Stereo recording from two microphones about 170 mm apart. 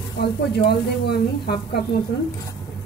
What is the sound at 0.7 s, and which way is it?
Speech, 70° left (ahead or behind).